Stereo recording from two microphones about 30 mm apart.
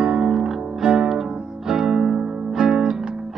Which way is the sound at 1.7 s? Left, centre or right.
Centre.